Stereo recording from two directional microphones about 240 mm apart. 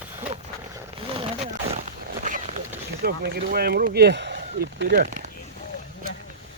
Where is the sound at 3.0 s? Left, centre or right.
Right.